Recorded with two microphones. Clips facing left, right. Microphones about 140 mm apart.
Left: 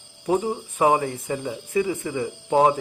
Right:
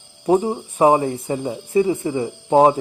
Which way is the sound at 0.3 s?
35° right (ahead or behind).